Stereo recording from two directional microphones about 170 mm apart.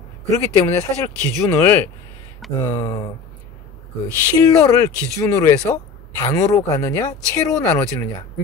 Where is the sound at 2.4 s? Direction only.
Centre (ahead or behind).